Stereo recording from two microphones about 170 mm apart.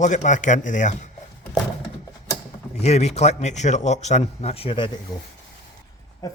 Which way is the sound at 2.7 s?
40° left (ahead or behind).